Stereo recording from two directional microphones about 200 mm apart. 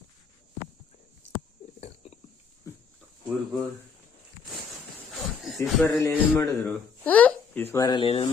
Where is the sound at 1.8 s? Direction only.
30° left (ahead or behind).